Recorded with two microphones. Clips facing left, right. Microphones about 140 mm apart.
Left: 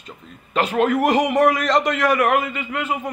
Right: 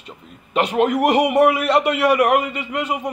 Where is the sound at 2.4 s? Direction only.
40° right (ahead or behind).